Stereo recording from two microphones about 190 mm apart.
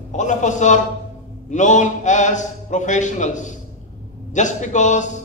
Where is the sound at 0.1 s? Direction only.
40° left (ahead or behind).